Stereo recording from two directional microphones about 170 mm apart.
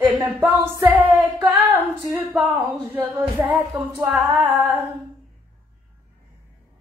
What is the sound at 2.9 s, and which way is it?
A woman's voice, 10° right (ahead or behind).